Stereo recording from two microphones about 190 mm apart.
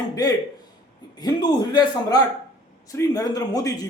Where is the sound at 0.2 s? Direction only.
20° left (ahead or behind).